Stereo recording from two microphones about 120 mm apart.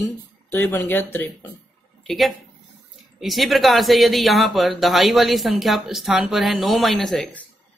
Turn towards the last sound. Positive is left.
turn(degrees=0)  # may be behind; listen again after turning